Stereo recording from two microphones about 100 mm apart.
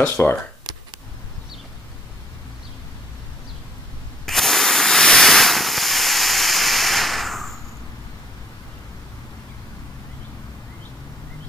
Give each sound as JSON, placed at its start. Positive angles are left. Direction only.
{"t": 0.0, "sound": "speech", "side_deg": 20}
{"t": 4.3, "sound": "hiss", "side_deg": 0}